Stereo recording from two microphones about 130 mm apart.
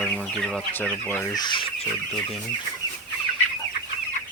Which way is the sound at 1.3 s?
35° left (ahead or behind).